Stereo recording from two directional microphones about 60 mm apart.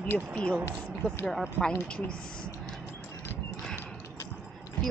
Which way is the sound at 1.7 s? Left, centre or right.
Left.